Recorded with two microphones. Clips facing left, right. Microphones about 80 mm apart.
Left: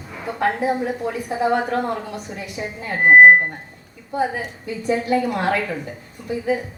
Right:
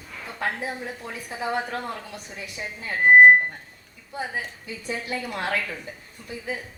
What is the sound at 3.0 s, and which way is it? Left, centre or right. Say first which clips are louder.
Speech: left 3 dB; left.